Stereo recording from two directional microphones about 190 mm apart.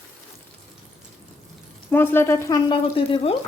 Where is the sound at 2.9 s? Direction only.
30° left (ahead or behind).